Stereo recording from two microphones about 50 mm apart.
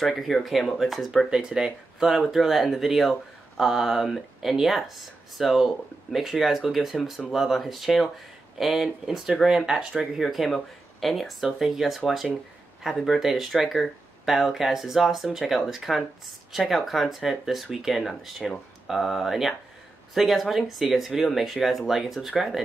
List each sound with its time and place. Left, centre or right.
0.1 s speech: centre
1.3 s speech: centre
10.1 s speech: centre